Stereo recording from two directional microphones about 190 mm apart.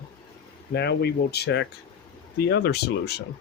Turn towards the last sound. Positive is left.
turn(degrees=55)  # may be behind; listen again after turning